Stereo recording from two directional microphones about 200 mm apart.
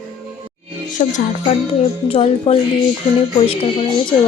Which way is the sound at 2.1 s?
30° left (ahead or behind).